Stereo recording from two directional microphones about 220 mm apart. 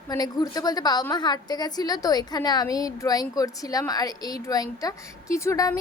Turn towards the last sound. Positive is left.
turn(degrees=15)  # may be behind; listen again after turning